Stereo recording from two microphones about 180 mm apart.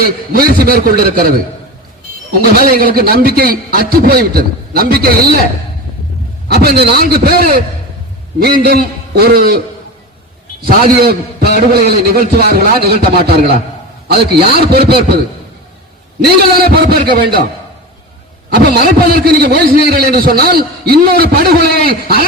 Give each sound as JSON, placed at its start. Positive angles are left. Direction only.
{"t": 0.0, "sound": "a man's voice", "side_deg": -55}
{"t": 2.4, "sound": "a man's voice", "side_deg": -55}
{"t": 6.5, "sound": "a man's voice", "side_deg": -60}
{"t": 10.7, "sound": "a man's voice", "side_deg": -55}
{"t": 16.2, "sound": "a man's voice", "side_deg": -60}
{"t": 18.5, "sound": "a man's voice", "side_deg": -60}